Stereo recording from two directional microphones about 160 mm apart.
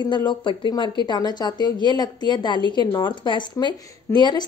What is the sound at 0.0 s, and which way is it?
A woman's voice, 30° left (ahead or behind).